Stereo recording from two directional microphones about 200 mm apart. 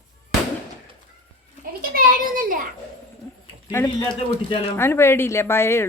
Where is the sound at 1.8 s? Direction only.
45° right (ahead or behind).